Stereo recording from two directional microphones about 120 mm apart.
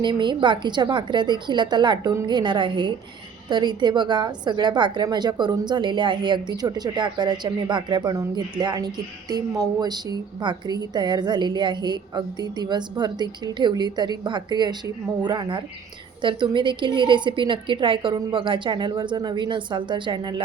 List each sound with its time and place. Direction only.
0.0 s a woman's voice: 40° right (ahead or behind)